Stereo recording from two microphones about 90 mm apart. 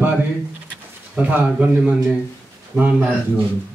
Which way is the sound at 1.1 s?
15° right (ahead or behind).